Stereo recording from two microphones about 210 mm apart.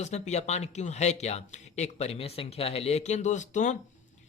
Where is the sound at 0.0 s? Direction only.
30° left (ahead or behind).